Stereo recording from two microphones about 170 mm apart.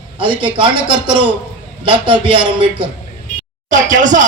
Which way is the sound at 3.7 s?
50° right (ahead or behind).